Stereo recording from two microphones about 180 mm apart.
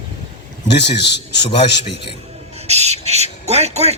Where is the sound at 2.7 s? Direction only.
35° right (ahead or behind).